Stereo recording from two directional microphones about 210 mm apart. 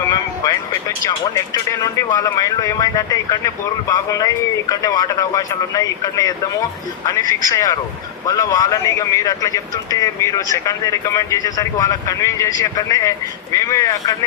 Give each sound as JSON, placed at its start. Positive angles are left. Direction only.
{"t": 0.0, "sound": "speech", "side_deg": 15}